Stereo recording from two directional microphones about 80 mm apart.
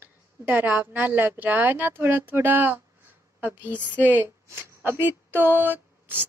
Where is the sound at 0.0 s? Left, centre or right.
Right.